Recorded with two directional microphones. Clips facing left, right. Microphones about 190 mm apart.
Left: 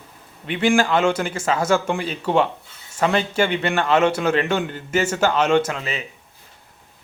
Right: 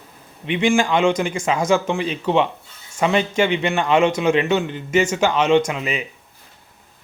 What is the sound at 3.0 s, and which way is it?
Speech, 5° right (ahead or behind).